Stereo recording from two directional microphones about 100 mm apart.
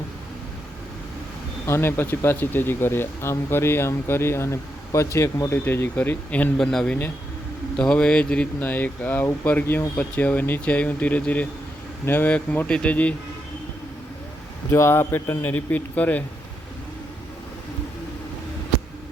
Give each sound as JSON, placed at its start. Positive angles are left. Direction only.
{"t": 1.6, "sound": "speech", "side_deg": 25}
{"t": 6.6, "sound": "speech", "side_deg": 5}
{"t": 14.7, "sound": "speech", "side_deg": 25}